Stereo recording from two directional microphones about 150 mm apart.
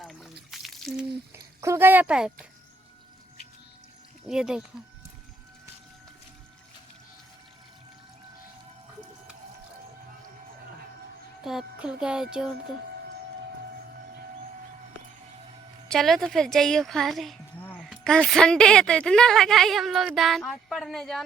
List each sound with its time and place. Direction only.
0.0 s a sound: centre (ahead or behind)
0.5 s drip: centre (ahead or behind)
1.6 s speech: 15° right (ahead or behind)
4.3 s speech: 5° right (ahead or behind)
11.4 s speech: 5° right (ahead or behind)
15.9 s speech: centre (ahead or behind)
17.6 s a sound: 10° left (ahead or behind)
17.8 s speech: 5° left (ahead or behind)